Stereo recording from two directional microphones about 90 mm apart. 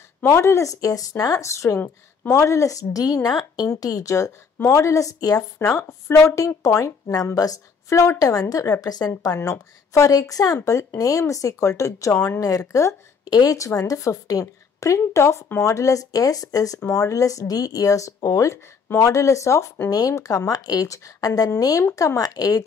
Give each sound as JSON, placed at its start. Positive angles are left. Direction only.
{"t": 0.2, "sound": "a woman's voice", "side_deg": 30}
{"t": 5.8, "sound": "a woman's voice", "side_deg": 30}
{"t": 8.8, "sound": "a woman's voice", "side_deg": 45}